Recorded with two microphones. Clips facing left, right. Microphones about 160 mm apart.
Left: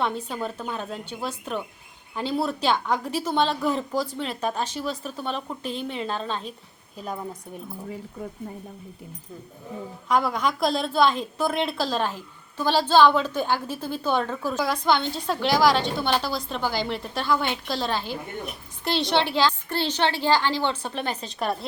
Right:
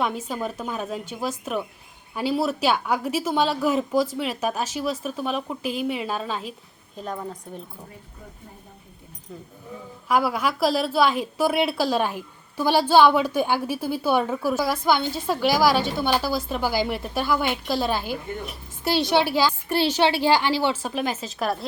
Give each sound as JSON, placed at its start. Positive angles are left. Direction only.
{"t": 0.3, "sound": "a woman's voice", "side_deg": -10}
{"t": 6.9, "sound": "a woman's voice", "side_deg": 5}
{"t": 10.1, "sound": "a woman's voice", "side_deg": -5}